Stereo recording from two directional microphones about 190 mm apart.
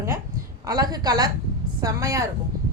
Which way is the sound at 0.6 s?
20° right (ahead or behind).